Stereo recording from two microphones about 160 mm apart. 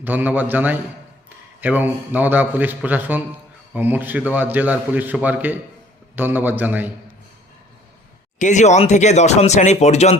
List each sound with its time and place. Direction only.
0.0 s a man's voice: 10° right (ahead or behind)
8.4 s speech: 50° left (ahead or behind)